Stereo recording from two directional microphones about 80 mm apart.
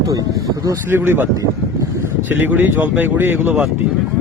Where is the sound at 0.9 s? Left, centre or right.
Right.